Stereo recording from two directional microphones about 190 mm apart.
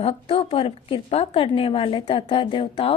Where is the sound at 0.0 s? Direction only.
30° left (ahead or behind).